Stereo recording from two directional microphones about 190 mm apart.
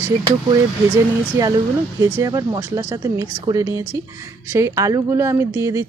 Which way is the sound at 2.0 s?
15° right (ahead or behind).